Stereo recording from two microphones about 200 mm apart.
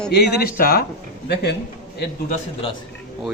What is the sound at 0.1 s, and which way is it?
A man's voice, 50° left (ahead or behind).